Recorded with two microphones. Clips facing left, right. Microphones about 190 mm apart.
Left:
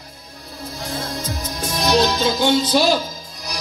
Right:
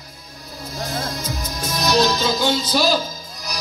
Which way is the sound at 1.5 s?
30° left (ahead or behind).